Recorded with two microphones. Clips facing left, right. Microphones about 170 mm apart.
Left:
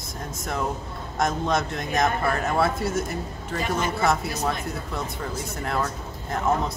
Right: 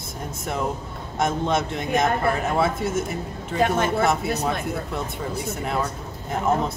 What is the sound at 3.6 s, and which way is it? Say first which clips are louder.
Speech: right 6 dB; 60° right (ahead or behind).